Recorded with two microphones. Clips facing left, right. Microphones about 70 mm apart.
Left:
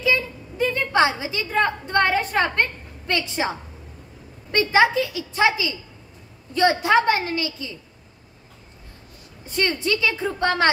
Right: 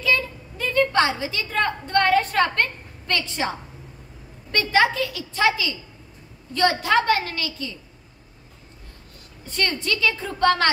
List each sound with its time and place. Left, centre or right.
0.0 s a woman's voice: centre
9.5 s a woman's voice: centre